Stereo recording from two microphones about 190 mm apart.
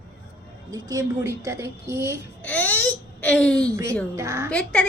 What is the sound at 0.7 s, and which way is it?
A woman's voice, 20° right (ahead or behind).